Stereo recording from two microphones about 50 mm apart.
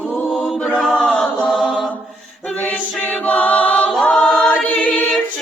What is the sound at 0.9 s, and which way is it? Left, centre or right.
Chant, centre.